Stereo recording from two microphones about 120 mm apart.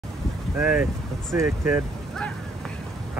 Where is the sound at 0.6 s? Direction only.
5° right (ahead or behind).